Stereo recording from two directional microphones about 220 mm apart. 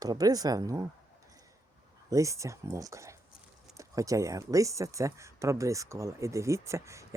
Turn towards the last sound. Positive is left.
turn(degrees=-15)  # may be behind; listen again after turning